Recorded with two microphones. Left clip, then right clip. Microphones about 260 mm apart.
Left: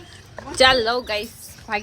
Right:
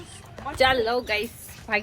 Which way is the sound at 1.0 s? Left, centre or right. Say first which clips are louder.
Left 1 dB; centre.